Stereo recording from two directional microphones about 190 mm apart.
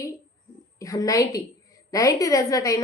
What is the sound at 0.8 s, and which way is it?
A woman's voice, 15° left (ahead or behind).